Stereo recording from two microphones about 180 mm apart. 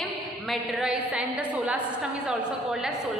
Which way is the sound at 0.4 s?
Centre (ahead or behind).